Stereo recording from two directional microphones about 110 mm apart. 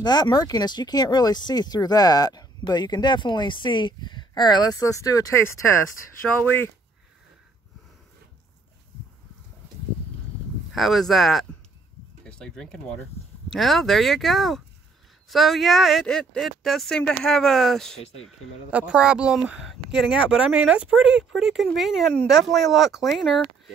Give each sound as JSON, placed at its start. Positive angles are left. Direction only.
{"t": 0.0, "sound": "speech", "side_deg": 40}
{"t": 10.7, "sound": "speech", "side_deg": 0}
{"t": 18.7, "sound": "speech", "side_deg": -10}